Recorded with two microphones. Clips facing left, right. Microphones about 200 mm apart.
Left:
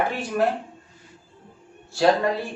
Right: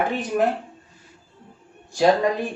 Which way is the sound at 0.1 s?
20° right (ahead or behind).